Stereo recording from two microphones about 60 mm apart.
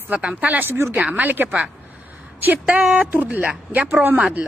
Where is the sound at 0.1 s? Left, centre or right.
Right.